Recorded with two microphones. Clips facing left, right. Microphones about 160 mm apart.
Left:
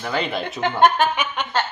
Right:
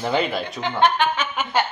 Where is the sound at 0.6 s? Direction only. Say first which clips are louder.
Left 3 dB; 45° left (ahead or behind).